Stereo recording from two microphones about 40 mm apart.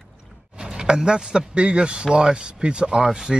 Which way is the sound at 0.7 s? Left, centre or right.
Centre.